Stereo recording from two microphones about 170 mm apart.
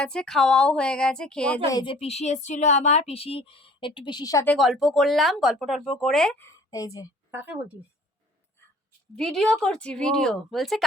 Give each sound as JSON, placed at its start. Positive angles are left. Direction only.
{"t": 0.0, "sound": "speech", "side_deg": 5}
{"t": 1.7, "sound": "speech", "side_deg": 30}
{"t": 4.4, "sound": "speech", "side_deg": 0}
{"t": 6.4, "sound": "a woman's voice", "side_deg": 20}
{"t": 7.3, "sound": "speech", "side_deg": -10}
{"t": 9.1, "sound": "speech", "side_deg": 5}